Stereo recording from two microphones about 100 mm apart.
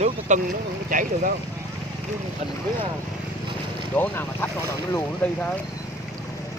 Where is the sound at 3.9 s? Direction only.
10° left (ahead or behind).